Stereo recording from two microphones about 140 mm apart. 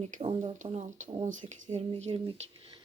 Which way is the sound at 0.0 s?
45° right (ahead or behind).